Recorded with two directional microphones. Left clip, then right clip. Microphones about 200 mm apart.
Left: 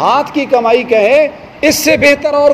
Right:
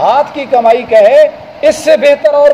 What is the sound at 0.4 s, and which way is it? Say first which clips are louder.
A man's voice: right 2 dB; 40° left (ahead or behind).